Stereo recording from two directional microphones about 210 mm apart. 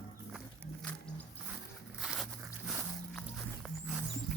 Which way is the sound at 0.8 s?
5° left (ahead or behind).